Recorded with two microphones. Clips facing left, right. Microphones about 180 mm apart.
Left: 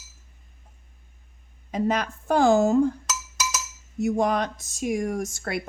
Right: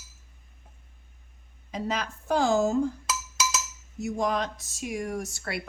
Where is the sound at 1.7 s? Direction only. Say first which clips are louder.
Left 6 dB; 55° left (ahead or behind).